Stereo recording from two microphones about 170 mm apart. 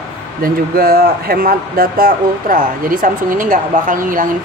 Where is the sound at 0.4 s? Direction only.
60° right (ahead or behind).